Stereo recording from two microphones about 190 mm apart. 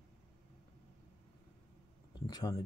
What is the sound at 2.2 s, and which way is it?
Speech, 20° left (ahead or behind).